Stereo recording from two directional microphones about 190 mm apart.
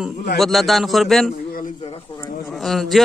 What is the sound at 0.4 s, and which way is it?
Speech, centre (ahead or behind).